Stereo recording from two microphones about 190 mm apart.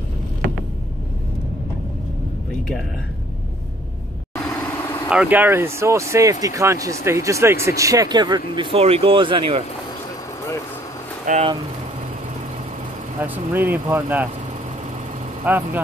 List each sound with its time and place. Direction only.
4.6 s vehicle: 15° left (ahead or behind)
5.1 s speech: 5° right (ahead or behind)
8.7 s speech: 30° right (ahead or behind)
11.2 s speech: 35° right (ahead or behind)
13.2 s speech: 10° right (ahead or behind)
15.4 s speech: 10° right (ahead or behind)